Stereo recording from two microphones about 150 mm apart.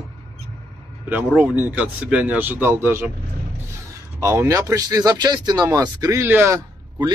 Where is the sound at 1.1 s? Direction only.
10° right (ahead or behind).